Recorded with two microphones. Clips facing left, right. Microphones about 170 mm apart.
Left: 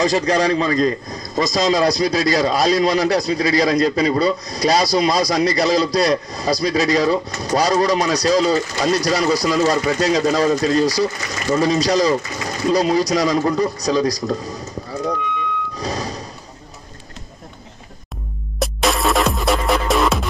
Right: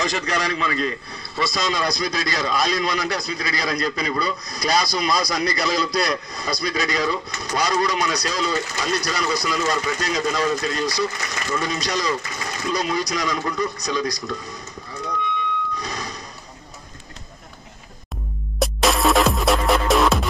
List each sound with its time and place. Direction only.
0.0 s a man's voice: 40° left (ahead or behind)
15.7 s a sound: 35° left (ahead or behind)
18.6 s music: centre (ahead or behind)